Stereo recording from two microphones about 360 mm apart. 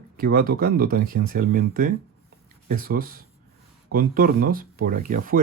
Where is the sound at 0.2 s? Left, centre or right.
Right.